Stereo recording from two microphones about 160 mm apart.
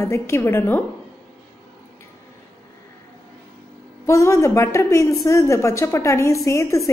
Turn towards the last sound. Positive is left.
turn(degrees=20)  # may be behind; listen again after turning